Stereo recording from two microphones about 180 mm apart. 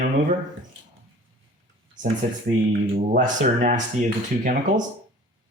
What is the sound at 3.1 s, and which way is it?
Speech, 45° right (ahead or behind).